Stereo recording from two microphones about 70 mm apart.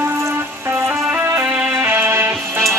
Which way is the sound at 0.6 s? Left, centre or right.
Right.